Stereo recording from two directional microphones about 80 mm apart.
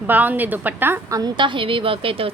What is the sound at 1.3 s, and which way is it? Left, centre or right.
Speech, right.